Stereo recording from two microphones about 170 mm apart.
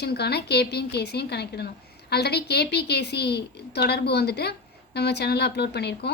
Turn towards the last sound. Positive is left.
turn(degrees=75)  # may be behind; listen again after turning